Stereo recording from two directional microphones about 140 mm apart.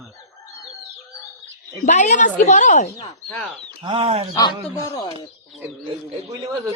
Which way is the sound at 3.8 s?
40° right (ahead or behind).